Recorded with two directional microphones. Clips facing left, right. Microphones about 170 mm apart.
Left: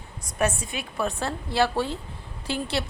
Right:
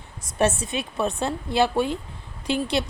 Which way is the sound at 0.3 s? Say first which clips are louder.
Right 4 dB; 25° right (ahead or behind).